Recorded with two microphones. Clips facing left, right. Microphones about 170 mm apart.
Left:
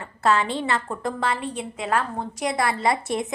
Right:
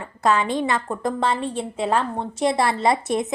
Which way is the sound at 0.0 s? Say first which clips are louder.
Right 1 dB; 15° right (ahead or behind).